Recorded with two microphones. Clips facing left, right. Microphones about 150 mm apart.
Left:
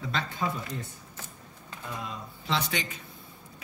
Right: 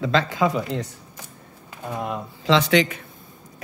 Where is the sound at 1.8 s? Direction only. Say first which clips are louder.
Right 10 dB; 60° right (ahead or behind).